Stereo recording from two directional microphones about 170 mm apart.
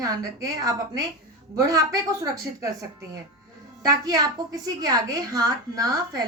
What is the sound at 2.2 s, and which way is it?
Speech, 20° right (ahead or behind).